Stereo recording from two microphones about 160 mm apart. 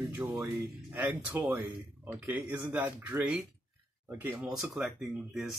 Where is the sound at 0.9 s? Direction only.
10° right (ahead or behind).